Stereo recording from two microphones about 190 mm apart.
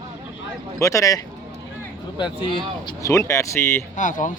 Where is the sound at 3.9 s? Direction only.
40° left (ahead or behind).